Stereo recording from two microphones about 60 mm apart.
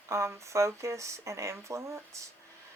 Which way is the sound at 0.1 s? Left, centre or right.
Right.